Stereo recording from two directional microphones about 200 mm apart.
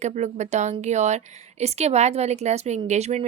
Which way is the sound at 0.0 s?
35° right (ahead or behind).